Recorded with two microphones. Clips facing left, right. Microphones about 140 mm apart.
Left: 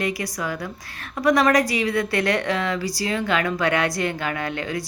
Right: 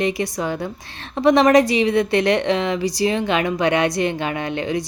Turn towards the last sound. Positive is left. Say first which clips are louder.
# right 4 dB
turn(degrees=-20)  # may be behind; listen again after turning